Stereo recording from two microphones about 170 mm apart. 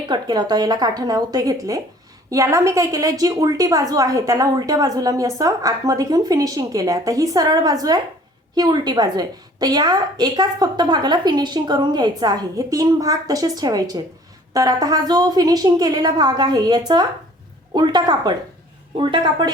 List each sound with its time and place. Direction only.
0.1 s a woman's voice: 25° right (ahead or behind)